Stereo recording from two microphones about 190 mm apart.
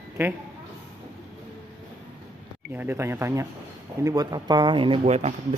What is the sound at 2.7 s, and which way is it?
Speech, 10° right (ahead or behind).